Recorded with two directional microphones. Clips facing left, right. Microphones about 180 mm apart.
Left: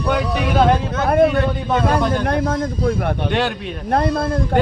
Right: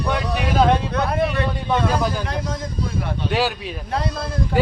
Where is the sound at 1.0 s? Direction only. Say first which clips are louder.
Left 11 dB; 60° left (ahead or behind).